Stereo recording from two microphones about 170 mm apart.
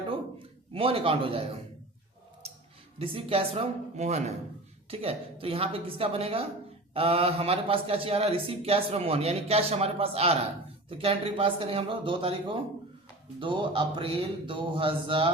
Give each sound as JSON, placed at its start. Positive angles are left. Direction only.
{"t": 0.3, "sound": "a man's voice", "side_deg": -30}
{"t": 3.0, "sound": "speech", "side_deg": -35}